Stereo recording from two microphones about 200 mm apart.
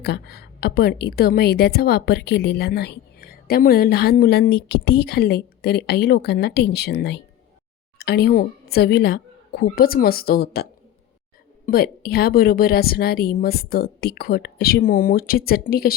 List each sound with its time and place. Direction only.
0.0 s a woman's voice: 55° left (ahead or behind)